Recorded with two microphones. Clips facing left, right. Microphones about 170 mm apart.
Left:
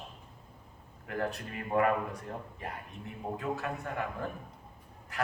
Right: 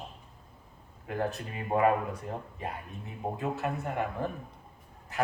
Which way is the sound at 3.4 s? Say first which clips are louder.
Right 3 dB; 25° right (ahead or behind).